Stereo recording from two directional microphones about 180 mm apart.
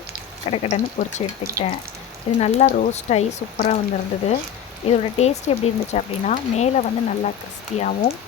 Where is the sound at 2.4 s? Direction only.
40° left (ahead or behind).